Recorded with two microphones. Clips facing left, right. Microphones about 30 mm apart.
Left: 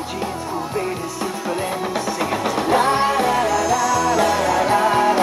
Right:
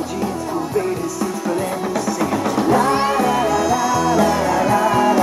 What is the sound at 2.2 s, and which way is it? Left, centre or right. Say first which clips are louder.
Music: right 2 dB; left.